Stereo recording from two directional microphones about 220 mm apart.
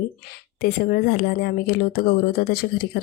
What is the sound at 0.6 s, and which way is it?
Speech, 45° left (ahead or behind).